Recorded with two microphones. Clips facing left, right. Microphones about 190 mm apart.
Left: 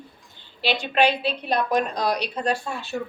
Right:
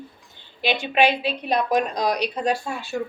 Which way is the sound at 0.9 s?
10° right (ahead or behind).